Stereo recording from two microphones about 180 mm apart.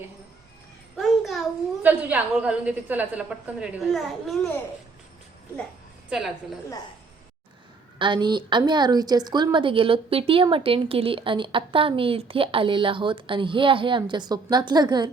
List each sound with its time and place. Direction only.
0.9 s a child's voice: centre (ahead or behind)
7.9 s a woman's voice: 25° right (ahead or behind)